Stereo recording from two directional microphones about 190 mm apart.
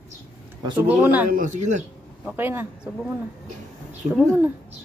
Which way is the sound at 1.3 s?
40° right (ahead or behind).